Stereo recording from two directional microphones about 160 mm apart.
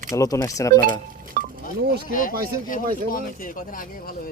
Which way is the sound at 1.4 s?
60° right (ahead or behind).